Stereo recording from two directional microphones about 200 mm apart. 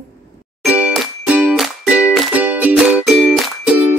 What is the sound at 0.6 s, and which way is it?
Music, 5° right (ahead or behind).